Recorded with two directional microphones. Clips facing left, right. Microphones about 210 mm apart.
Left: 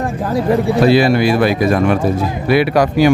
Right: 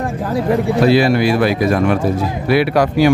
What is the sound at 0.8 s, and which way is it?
Speech, 25° left (ahead or behind).